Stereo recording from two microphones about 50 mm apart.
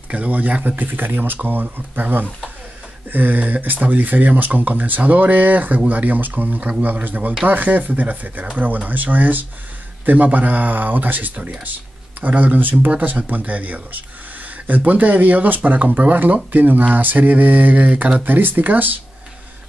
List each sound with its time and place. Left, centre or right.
0.1 s speech: right